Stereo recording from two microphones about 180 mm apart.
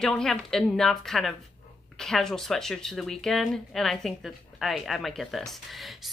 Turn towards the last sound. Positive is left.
turn(degrees=0)  # may be behind; listen again after turning